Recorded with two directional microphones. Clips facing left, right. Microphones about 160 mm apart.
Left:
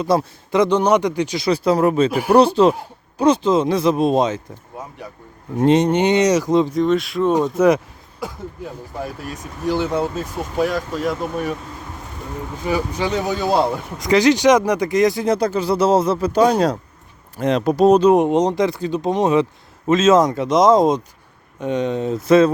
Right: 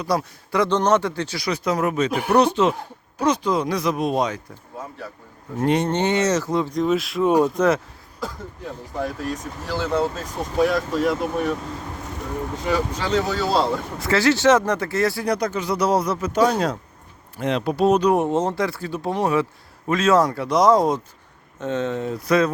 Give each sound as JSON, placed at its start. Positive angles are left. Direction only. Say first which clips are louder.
{"t": 0.0, "sound": "speech", "louder": "left 5 dB", "side_deg": 25}
{"t": 1.4, "sound": "speech", "louder": "left 6 dB", "side_deg": 30}
{"t": 5.5, "sound": "speech", "louder": "left 5 dB", "side_deg": 20}
{"t": 6.7, "sound": "speech", "louder": "left 3 dB", "side_deg": 0}
{"t": 7.5, "sound": "speech", "louder": "left 4 dB", "side_deg": 10}
{"t": 9.0, "sound": "speech", "louder": "right 3 dB", "side_deg": 10}
{"t": 10.6, "sound": "speech", "louder": "right 1 dB", "side_deg": 0}
{"t": 12.6, "sound": "speech", "louder": "left 3 dB", "side_deg": 10}
{"t": 18.1, "sound": "speech", "louder": "left 5 dB", "side_deg": 15}